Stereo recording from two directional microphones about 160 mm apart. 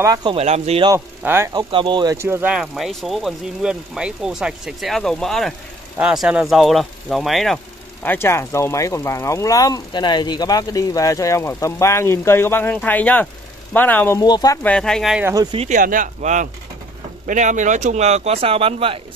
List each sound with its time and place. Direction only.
0.0 s speech: 25° right (ahead or behind); by 0.8 s 40° right (ahead or behind)
0.8 s speech: 15° right (ahead or behind)
1.5 s speech: 30° right (ahead or behind)
2.1 s speech: 15° right (ahead or behind); by 14.2 s 10° left (ahead or behind)
14.2 s speech: 25° left (ahead or behind)
14.6 s speech: 5° left (ahead or behind)
15.7 s speech: 55° right (ahead or behind); by 18.9 s 35° right (ahead or behind)